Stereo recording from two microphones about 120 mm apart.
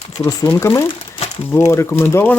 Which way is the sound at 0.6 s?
25° left (ahead or behind).